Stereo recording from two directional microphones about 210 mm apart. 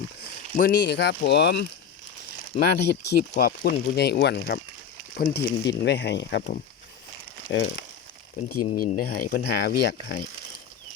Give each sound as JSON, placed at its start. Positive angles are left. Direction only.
{"t": 0.5, "sound": "speech", "side_deg": 45}
{"t": 7.5, "sound": "speech", "side_deg": 60}
{"t": 8.7, "sound": "speech", "side_deg": 40}